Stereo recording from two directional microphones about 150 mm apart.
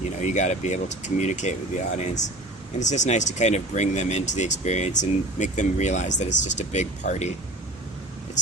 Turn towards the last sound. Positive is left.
turn(degrees=50)  # may be behind; listen again after turning